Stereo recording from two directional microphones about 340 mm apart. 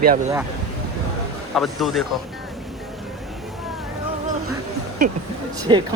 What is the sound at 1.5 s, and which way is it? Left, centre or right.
Speech, centre.